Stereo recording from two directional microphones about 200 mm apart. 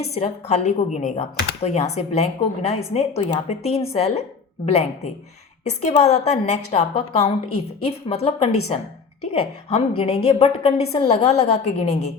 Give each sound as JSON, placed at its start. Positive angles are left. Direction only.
{"t": 0.0, "sound": "a woman's voice", "side_deg": 30}
{"t": 6.0, "sound": "a woman's voice", "side_deg": 35}